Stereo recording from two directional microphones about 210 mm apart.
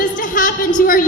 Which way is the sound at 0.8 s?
40° left (ahead or behind).